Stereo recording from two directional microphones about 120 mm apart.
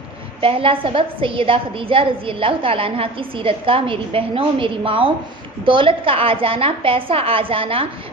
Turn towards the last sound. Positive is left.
turn(degrees=-50)  # may be behind; listen again after turning